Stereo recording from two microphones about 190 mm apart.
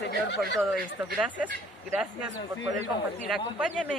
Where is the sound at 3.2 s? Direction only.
5° right (ahead or behind).